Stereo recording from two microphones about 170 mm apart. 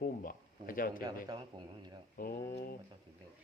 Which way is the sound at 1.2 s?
25° right (ahead or behind).